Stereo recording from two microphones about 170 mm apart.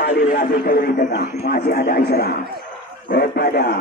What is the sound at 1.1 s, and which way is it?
A man's voice, 70° left (ahead or behind).